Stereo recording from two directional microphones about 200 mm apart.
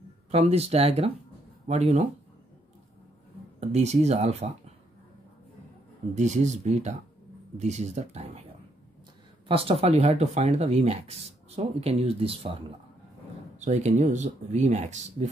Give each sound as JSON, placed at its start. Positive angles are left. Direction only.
{"t": 0.3, "sound": "speech", "side_deg": -30}
{"t": 3.6, "sound": "speech", "side_deg": -35}
{"t": 6.1, "sound": "speech", "side_deg": -35}
{"t": 9.5, "sound": "speech", "side_deg": -30}
{"t": 13.6, "sound": "speech", "side_deg": -35}